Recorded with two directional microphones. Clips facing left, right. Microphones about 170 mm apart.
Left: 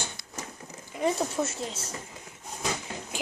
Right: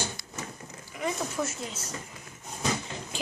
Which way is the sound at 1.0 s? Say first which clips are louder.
Left 4 dB; 30° left (ahead or behind).